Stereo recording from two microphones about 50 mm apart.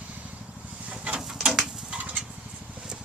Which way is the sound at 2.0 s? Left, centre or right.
Right.